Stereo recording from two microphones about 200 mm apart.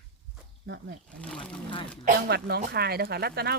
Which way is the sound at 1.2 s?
5° left (ahead or behind).